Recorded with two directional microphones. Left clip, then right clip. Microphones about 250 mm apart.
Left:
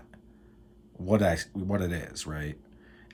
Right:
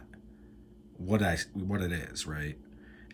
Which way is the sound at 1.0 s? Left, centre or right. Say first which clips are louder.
Left 5 dB; centre.